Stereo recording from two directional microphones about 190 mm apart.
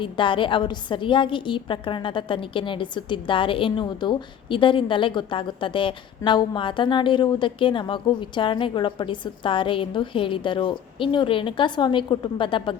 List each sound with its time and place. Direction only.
0.0 s a woman's voice: 25° left (ahead or behind)